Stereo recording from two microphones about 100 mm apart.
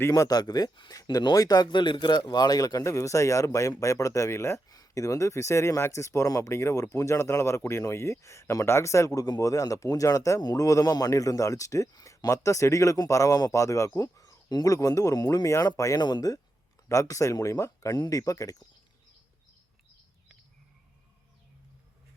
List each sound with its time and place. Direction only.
0.1 s speech: 40° left (ahead or behind)
16.9 s speech: 30° left (ahead or behind)